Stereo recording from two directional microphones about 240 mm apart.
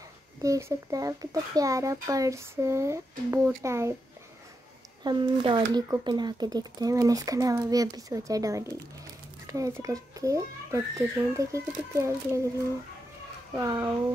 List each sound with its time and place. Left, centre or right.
0.4 s speech: centre
5.0 s speech: centre
13.6 s speech: centre